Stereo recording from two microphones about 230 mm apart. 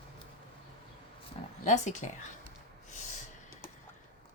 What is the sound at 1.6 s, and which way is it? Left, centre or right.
Speech, left.